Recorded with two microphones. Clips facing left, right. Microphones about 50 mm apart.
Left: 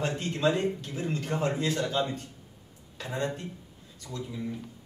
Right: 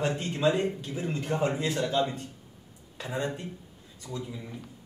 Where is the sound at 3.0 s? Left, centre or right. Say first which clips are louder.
Even; centre.